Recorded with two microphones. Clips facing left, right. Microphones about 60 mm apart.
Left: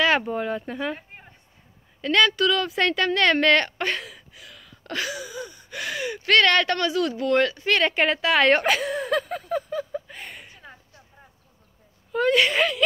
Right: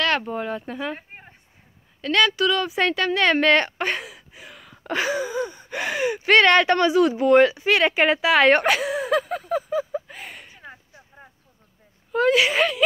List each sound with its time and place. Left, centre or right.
0.2 s speech: centre
0.9 s a sound: right
2.0 s speech: centre
4.3 s gasp: right; by 10.5 s centre
10.5 s a sound: centre
12.1 s speech: centre